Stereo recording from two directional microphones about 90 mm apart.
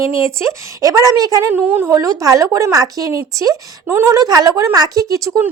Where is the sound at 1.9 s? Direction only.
40° right (ahead or behind).